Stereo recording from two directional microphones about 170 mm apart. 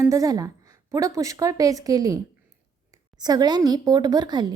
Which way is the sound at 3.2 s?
25° right (ahead or behind).